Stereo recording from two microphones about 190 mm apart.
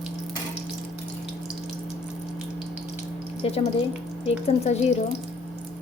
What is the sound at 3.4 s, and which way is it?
Speech, 30° left (ahead or behind).